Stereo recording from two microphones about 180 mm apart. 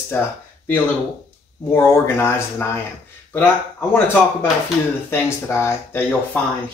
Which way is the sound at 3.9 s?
10° left (ahead or behind).